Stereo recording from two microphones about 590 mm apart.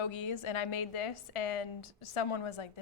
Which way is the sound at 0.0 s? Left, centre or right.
Left.